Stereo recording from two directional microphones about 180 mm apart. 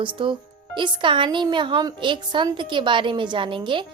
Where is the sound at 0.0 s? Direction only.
25° right (ahead or behind).